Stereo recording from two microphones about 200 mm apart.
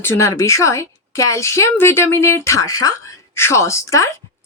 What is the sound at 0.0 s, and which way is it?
A woman's voice, 15° left (ahead or behind).